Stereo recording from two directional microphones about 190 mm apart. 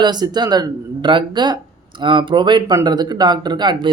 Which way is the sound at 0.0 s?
20° right (ahead or behind).